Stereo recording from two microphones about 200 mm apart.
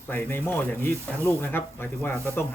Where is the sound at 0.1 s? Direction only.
10° left (ahead or behind).